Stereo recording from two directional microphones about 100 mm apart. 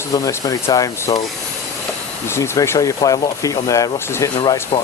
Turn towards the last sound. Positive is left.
turn(degrees=55)  # may be behind; listen again after turning